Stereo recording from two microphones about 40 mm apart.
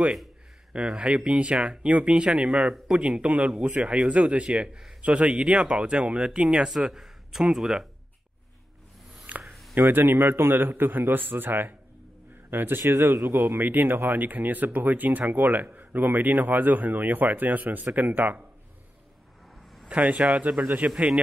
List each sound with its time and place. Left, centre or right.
0.7 s speech: right
5.3 s speech: right
9.4 s a sound: centre
9.8 s a man's voice: right
19.9 s speech: right